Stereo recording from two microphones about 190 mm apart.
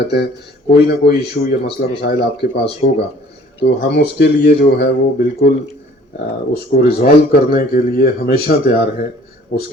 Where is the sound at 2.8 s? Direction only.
45° left (ahead or behind).